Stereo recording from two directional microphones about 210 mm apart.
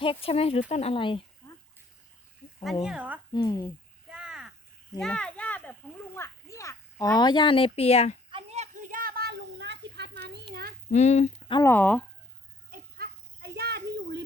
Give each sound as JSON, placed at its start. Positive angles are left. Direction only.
{"t": 0.0, "sound": "speech", "side_deg": 25}
{"t": 2.8, "sound": "speech", "side_deg": -5}
{"t": 3.3, "sound": "speech", "side_deg": 20}
{"t": 4.1, "sound": "a sound", "side_deg": -5}
{"t": 4.9, "sound": "a child's voice", "side_deg": 5}
{"t": 8.3, "sound": "a sound", "side_deg": -25}
{"t": 10.9, "sound": "speech", "side_deg": 35}
{"t": 11.5, "sound": "speech", "side_deg": 10}
{"t": 12.7, "sound": "children playing", "side_deg": -45}